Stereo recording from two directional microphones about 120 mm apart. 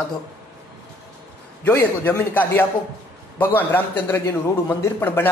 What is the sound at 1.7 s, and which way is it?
A man's voice, 20° left (ahead or behind).